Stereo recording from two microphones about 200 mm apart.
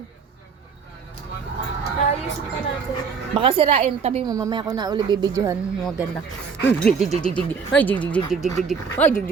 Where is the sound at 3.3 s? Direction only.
25° right (ahead or behind).